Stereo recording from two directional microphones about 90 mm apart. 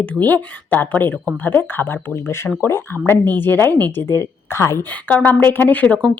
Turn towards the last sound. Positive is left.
turn(degrees=15)  # may be behind; listen again after turning